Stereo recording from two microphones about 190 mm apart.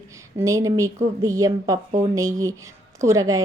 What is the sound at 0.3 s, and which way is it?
A woman's voice, 15° right (ahead or behind).